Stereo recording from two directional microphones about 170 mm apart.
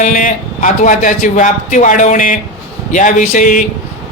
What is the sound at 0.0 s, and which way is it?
A man's voice, 50° left (ahead or behind).